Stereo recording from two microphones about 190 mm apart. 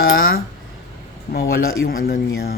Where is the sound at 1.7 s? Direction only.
50° left (ahead or behind).